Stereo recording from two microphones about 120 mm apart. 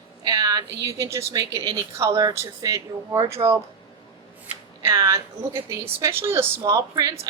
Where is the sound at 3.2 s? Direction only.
45° right (ahead or behind).